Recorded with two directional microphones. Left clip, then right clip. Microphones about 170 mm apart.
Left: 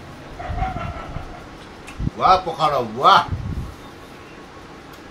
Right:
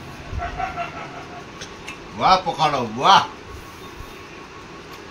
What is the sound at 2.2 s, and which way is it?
Speech, 20° left (ahead or behind).